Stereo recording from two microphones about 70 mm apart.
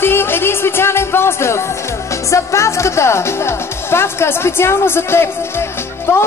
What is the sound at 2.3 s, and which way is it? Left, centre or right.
A man's voice, left.